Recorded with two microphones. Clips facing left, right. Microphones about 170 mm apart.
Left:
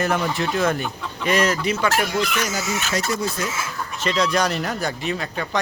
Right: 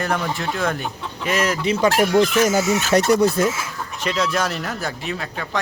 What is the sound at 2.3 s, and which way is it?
Speech, 50° right (ahead or behind).